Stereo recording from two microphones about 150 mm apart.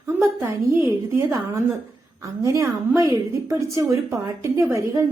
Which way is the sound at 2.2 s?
20° right (ahead or behind).